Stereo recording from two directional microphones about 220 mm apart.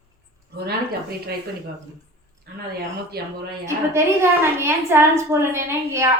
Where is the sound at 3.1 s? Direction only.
45° right (ahead or behind).